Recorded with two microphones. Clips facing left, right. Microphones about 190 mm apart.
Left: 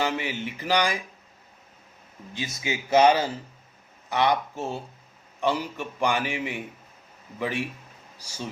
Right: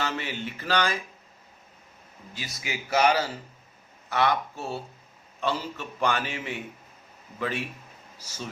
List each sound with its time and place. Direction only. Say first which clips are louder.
0.0 s a man's voice: left 4 dB; 15° left (ahead or behind)
2.3 s a man's voice: left 5 dB; 20° left (ahead or behind)